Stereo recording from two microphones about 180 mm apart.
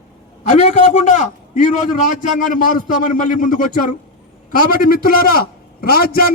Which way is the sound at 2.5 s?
45° left (ahead or behind).